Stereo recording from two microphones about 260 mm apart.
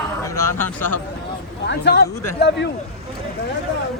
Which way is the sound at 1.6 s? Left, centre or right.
Left.